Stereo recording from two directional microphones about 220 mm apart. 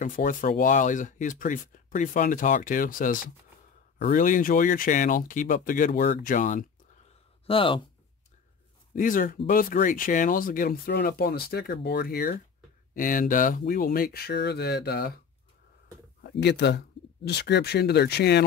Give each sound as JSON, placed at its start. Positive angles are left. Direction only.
{"t": 0.0, "sound": "speech", "side_deg": 35}
{"t": 7.4, "sound": "speech", "side_deg": 25}
{"t": 8.9, "sound": "speech", "side_deg": 40}
{"t": 16.2, "sound": "speech", "side_deg": 50}